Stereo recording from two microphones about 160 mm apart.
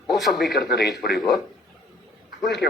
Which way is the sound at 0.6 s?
85° left.